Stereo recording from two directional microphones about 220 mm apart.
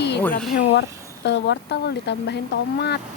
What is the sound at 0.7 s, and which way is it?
Speech, 50° left (ahead or behind).